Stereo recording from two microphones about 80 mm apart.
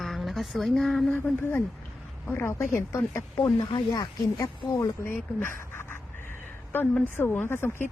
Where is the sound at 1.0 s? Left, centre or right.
Centre.